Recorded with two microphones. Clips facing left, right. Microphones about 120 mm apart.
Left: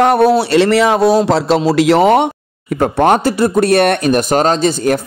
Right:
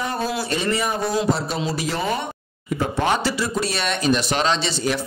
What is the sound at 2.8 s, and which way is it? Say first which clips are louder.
Speech: left 10 dB; 55° left (ahead or behind).